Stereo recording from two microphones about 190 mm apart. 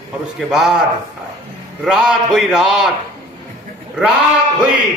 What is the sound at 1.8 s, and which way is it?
A man's voice, centre (ahead or behind).